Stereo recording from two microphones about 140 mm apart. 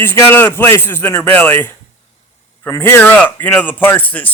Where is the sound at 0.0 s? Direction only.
15° left (ahead or behind).